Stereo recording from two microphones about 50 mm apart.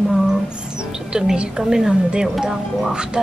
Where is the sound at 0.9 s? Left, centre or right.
Centre.